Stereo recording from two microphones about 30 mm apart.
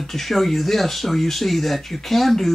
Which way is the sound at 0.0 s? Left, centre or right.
Centre.